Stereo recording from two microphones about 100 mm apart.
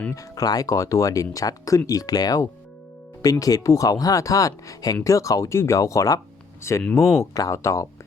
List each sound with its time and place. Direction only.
0.1 s speech: 35° left (ahead or behind)